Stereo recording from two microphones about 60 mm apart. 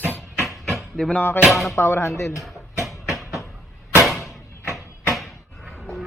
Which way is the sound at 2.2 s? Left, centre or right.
Left.